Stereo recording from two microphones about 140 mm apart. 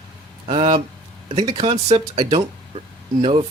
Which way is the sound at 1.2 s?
30° right (ahead or behind).